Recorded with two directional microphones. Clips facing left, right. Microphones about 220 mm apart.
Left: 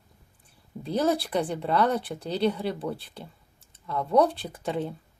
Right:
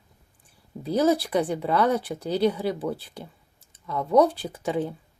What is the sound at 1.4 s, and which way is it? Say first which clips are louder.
Speech: right 2 dB; 5° right (ahead or behind).